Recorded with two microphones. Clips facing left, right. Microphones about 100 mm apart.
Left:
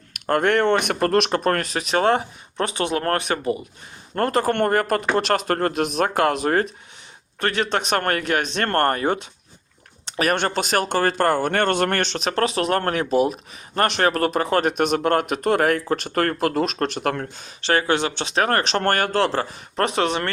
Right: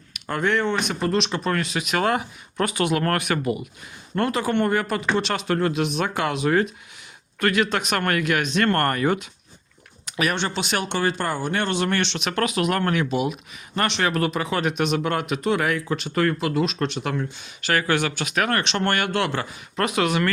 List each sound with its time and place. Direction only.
0.1 s speech: 55° left (ahead or behind); by 3.7 s 30° left (ahead or behind)
4.1 s speech: 45° left (ahead or behind)
7.3 s speech: 35° left (ahead or behind)